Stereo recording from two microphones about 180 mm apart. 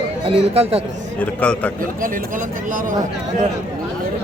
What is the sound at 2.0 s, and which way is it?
Speech, 50° right (ahead or behind).